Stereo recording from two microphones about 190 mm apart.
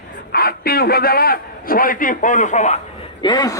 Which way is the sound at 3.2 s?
20° left (ahead or behind).